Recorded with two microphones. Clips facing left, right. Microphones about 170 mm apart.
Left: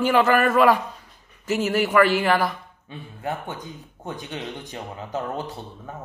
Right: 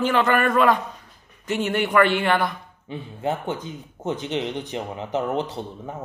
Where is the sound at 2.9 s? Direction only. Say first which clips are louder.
Right 4 dB; 20° right (ahead or behind).